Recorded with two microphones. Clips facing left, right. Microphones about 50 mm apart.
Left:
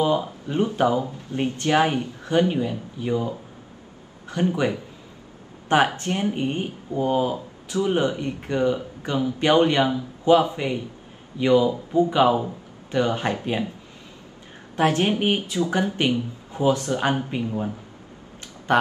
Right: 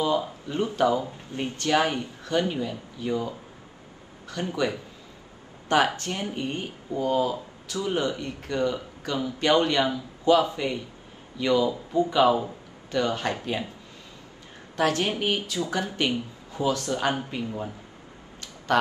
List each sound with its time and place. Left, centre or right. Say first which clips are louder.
0.0 s speech: left 3 dB; left
14.8 s speech: left 4 dB; left